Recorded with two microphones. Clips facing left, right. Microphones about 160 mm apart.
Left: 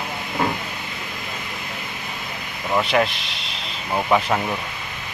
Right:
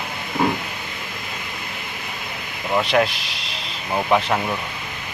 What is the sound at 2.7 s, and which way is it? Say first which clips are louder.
Speech: right 1 dB; centre (ahead or behind).